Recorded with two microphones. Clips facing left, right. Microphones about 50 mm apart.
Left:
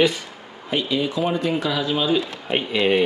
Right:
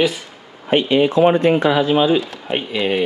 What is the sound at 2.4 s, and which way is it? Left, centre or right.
Speech, centre.